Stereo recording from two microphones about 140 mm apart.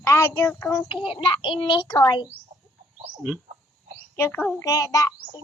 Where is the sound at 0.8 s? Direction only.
40° left (ahead or behind).